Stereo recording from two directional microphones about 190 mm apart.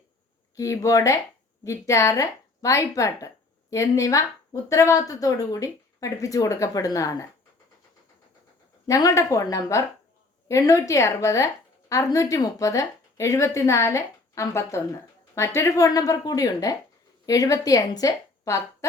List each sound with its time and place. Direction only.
0.5 s speech: 15° left (ahead or behind)
8.9 s a woman's voice: 15° left (ahead or behind)